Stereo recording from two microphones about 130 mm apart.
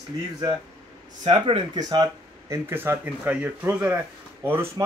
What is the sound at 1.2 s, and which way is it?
Speech, 45° right (ahead or behind).